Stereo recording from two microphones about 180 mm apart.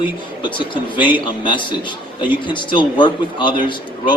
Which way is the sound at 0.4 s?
25° left (ahead or behind).